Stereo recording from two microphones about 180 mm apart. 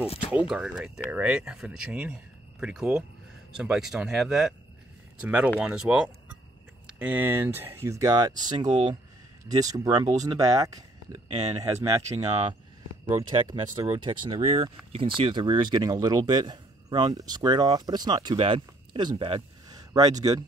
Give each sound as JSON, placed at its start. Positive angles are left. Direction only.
{"t": 0.0, "sound": "a sound", "side_deg": 35}
{"t": 0.5, "sound": "speech", "side_deg": -5}
{"t": 13.5, "sound": "speech", "side_deg": -20}